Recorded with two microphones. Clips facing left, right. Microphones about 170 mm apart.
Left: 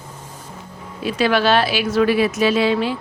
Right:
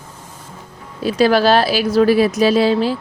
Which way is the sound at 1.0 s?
35° right (ahead or behind).